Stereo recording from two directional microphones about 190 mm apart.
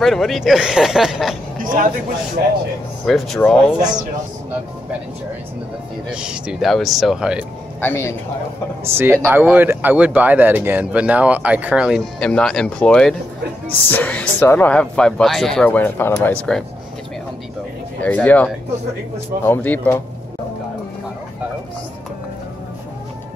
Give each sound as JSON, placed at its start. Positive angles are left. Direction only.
{"t": 0.0, "sound": "speech", "side_deg": 0}
{"t": 2.4, "sound": "speech", "side_deg": -55}
{"t": 3.1, "sound": "speech", "side_deg": 0}
{"t": 6.1, "sound": "speech", "side_deg": -5}
{"t": 7.8, "sound": "speech", "side_deg": 15}
{"t": 8.8, "sound": "speech", "side_deg": -10}
{"t": 18.0, "sound": "speech", "side_deg": 10}